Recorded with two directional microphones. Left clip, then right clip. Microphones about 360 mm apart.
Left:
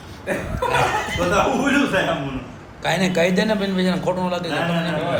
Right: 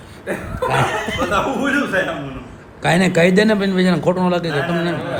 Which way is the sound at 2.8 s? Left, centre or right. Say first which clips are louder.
Right 4 dB; right.